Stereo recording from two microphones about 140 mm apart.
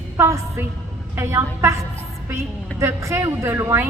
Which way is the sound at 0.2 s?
20° right (ahead or behind).